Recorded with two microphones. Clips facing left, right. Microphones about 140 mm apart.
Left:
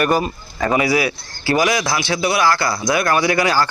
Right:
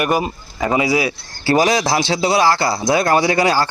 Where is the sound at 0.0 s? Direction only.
15° right (ahead or behind).